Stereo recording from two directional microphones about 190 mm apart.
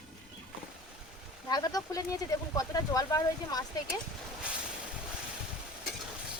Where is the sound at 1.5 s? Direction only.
20° left (ahead or behind).